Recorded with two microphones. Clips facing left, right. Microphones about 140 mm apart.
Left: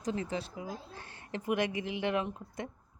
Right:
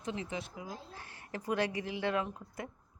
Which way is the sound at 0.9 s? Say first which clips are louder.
Left 2 dB; 30° left (ahead or behind).